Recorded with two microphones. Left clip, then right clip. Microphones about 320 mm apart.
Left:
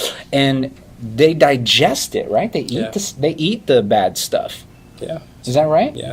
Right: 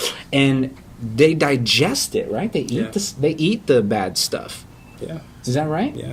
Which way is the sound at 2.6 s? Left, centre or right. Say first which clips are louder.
Left 2 dB; centre.